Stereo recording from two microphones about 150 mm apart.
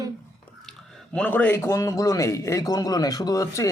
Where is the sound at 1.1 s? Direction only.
10° left (ahead or behind).